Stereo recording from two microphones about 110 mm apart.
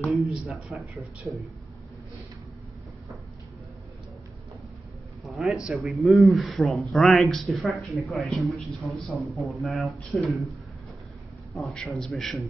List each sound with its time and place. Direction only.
0.1 s a man's voice: centre (ahead or behind)
5.2 s a man's voice: centre (ahead or behind)
11.5 s a man's voice: 5° left (ahead or behind)